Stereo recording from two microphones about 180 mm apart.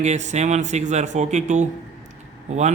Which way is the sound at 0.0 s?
40° right (ahead or behind).